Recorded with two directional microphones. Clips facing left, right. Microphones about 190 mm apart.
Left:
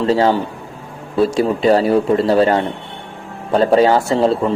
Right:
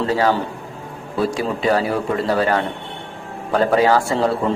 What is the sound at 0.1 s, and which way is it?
A man's voice, 25° left (ahead or behind).